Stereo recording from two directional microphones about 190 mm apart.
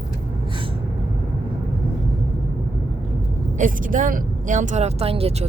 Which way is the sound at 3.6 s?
45° right (ahead or behind).